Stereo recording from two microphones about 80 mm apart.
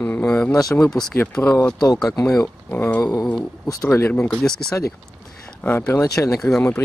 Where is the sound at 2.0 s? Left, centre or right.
Left.